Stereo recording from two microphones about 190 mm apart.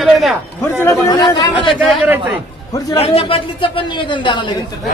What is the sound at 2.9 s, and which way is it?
Speech, 30° left (ahead or behind).